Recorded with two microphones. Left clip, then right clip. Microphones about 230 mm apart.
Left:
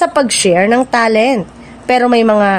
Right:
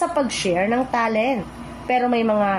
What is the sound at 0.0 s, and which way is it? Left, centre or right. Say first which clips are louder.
A woman's voice: left 10 dB; left.